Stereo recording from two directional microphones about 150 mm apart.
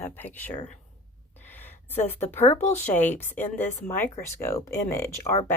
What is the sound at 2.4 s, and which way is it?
Speech, 50° left (ahead or behind).